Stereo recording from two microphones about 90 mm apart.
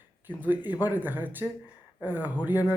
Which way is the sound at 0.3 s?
20° right (ahead or behind).